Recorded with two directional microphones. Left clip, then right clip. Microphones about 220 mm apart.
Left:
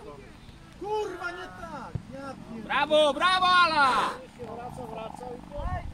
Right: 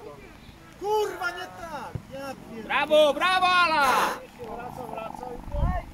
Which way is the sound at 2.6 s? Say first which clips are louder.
Right 2 dB; 10° left (ahead or behind).